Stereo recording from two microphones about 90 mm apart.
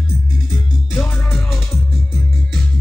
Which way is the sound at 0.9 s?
20° left (ahead or behind).